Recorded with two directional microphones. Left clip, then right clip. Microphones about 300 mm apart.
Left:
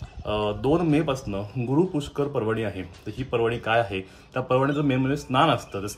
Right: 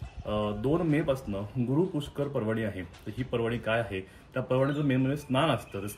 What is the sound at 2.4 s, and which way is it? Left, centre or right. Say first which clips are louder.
Speech: left 5 dB; centre.